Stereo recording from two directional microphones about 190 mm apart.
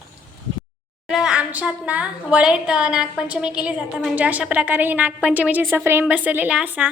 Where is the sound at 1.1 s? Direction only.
5° right (ahead or behind).